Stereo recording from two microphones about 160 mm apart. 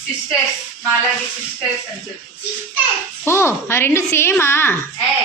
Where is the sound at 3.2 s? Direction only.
15° left (ahead or behind).